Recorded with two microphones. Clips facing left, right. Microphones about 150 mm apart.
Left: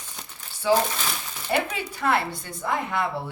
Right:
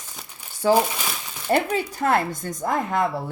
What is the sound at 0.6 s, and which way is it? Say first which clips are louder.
A woman's voice: right 3 dB; 45° right (ahead or behind).